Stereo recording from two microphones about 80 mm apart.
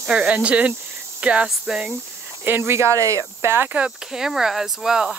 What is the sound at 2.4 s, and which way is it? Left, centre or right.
Speech, right.